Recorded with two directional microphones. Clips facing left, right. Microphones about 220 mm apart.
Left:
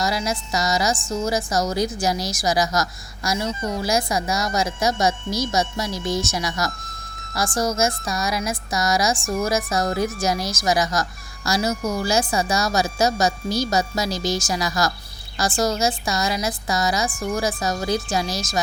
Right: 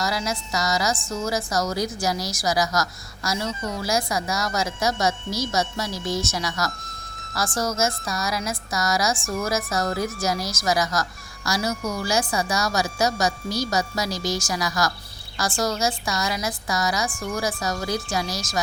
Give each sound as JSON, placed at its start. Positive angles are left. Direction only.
{"t": 0.0, "sound": "a woman's voice", "side_deg": 20}